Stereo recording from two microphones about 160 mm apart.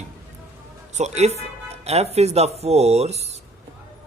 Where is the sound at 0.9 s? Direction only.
45° right (ahead or behind).